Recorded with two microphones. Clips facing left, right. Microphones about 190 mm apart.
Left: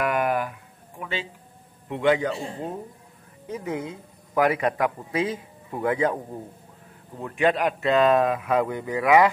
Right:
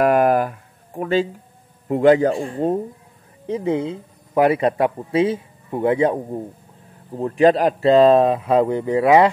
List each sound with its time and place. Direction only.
0.0 s a sound: 40° right (ahead or behind)
1.9 s speech: 40° right (ahead or behind)
3.4 s speech: 30° right (ahead or behind)